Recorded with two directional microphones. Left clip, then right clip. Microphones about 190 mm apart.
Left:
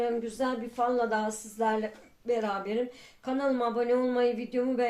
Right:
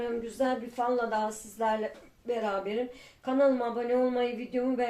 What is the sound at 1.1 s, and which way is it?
A woman's voice, 45° left (ahead or behind).